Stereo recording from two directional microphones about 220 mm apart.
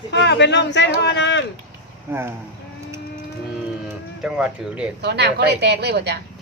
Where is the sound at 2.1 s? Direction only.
10° right (ahead or behind).